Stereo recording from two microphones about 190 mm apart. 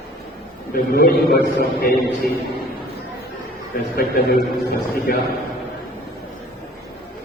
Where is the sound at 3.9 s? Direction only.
50° left (ahead or behind).